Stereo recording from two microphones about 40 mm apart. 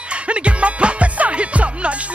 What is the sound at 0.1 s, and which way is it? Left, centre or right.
Music, right.